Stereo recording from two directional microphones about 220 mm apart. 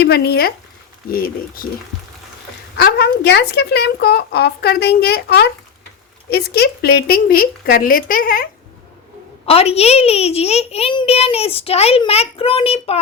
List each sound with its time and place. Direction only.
0.0 s a woman's voice: 45° left (ahead or behind)
2.7 s a woman's voice: 45° left (ahead or behind)
9.5 s a child's voice: 25° left (ahead or behind)